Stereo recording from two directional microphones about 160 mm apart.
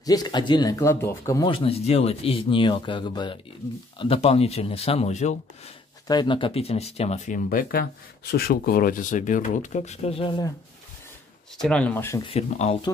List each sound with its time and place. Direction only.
0.0 s speech: 25° left (ahead or behind)
1.5 s speech: 35° left (ahead or behind)
6.0 s speech: 30° left (ahead or behind)
7.3 s speech: 60° left (ahead or behind); by 10.5 s 30° left (ahead or behind)
11.6 s speech: 5° left (ahead or behind)
12.2 s speech: 40° left (ahead or behind)